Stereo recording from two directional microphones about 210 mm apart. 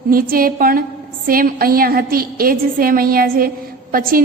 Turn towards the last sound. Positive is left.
turn(degrees=-45)  # may be behind; listen again after turning